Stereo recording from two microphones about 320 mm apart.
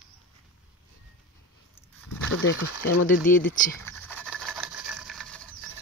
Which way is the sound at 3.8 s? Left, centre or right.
Centre.